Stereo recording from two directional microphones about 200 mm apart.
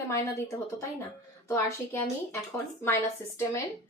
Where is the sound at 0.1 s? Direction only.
15° left (ahead or behind).